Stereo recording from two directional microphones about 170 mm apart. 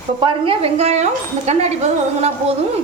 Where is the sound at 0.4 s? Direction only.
35° right (ahead or behind).